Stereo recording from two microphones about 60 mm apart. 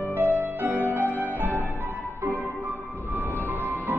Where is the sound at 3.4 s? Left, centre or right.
Right.